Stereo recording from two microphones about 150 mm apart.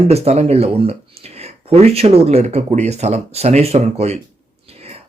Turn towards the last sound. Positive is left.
turn(degrees=-45)  # may be behind; listen again after turning